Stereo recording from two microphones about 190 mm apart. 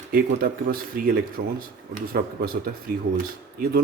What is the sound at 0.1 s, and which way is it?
Speech, 50° right (ahead or behind).